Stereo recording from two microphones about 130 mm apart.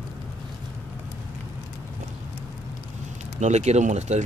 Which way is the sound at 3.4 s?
60° right (ahead or behind).